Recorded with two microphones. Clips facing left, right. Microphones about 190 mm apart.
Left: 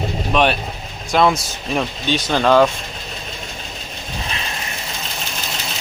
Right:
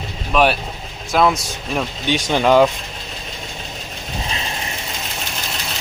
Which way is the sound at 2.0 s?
15° right (ahead or behind).